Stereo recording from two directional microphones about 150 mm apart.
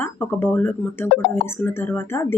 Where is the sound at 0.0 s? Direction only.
15° left (ahead or behind).